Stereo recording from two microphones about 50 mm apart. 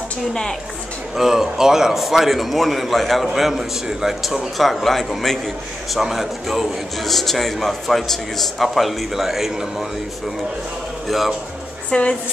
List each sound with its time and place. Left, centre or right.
0.3 s a woman's voice: centre
1.1 s a man's voice: centre
11.1 s a man's voice: centre
11.9 s a woman's voice: centre